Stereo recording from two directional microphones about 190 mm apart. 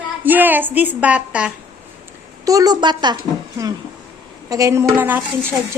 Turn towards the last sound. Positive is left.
turn(degrees=-10)  # may be behind; listen again after turning